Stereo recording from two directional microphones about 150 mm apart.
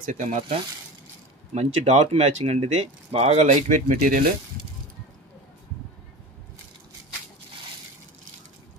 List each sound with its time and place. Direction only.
0.0 s speech: 55° right (ahead or behind); by 4.3 s 75° right (ahead or behind)